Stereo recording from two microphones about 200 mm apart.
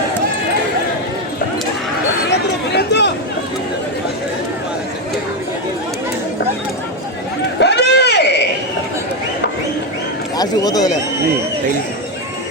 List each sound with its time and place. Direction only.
2.7 s chatter: 60° left (ahead or behind)
7.6 s a sound: 60° left (ahead or behind)
10.3 s a man's voice: 20° left (ahead or behind)